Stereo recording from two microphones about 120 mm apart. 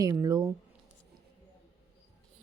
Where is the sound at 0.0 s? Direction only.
25° right (ahead or behind).